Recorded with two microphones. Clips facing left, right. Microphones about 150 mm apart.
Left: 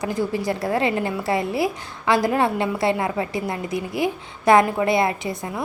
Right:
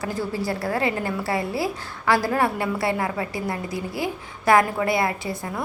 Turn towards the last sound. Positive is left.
turn(degrees=20)  # may be behind; listen again after turning